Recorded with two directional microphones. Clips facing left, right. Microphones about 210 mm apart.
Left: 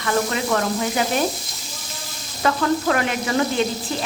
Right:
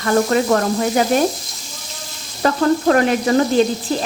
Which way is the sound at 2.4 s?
35° right (ahead or behind).